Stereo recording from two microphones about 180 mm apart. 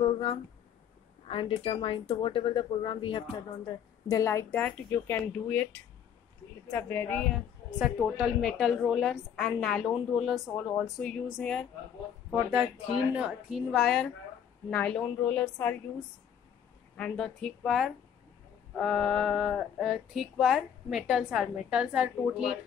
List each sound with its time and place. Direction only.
0.0 s speech: 30° left (ahead or behind)
4.1 s speech: 15° left (ahead or behind)
6.7 s speech: 10° left (ahead or behind)
7.8 s speech: 5° right (ahead or behind)
16.9 s speech: 5° left (ahead or behind)